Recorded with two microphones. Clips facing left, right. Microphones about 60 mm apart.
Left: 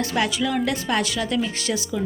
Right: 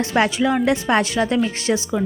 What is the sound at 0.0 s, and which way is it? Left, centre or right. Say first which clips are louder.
A woman's voice: right 5 dB; right.